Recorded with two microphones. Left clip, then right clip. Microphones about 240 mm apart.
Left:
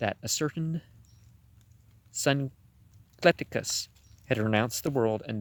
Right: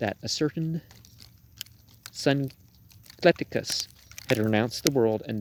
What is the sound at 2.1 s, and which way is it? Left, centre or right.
Speech, left.